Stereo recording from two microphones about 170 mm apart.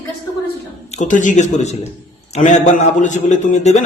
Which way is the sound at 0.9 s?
45° left (ahead or behind).